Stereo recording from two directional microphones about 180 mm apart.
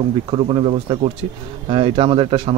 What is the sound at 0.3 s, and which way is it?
A man's voice, 30° right (ahead or behind).